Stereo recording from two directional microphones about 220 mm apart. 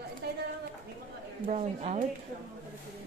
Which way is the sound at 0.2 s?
45° right (ahead or behind).